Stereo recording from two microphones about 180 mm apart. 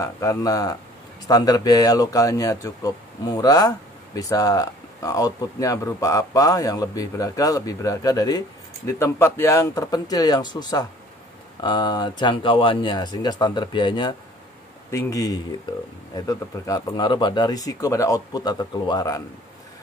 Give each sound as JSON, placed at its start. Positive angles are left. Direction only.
{"t": 0.0, "sound": "a man's voice", "side_deg": 15}